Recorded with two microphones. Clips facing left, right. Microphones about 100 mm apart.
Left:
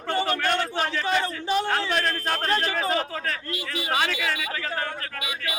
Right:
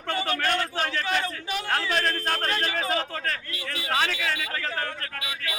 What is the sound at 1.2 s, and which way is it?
Speech, 35° left (ahead or behind).